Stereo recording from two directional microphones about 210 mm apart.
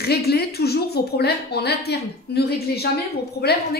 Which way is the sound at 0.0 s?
50° left (ahead or behind).